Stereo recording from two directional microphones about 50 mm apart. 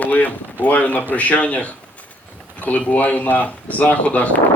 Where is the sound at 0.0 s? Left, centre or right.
Left.